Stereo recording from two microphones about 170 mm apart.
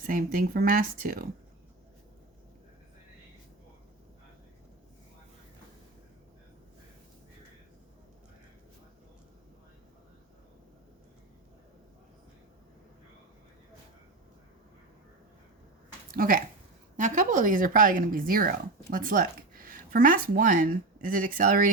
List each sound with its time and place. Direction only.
0.0 s speech: 55° right (ahead or behind)
16.1 s a sound: 55° right (ahead or behind)
17.0 s speech: 50° right (ahead or behind)